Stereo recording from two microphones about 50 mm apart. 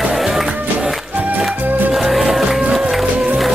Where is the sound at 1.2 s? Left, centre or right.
Right.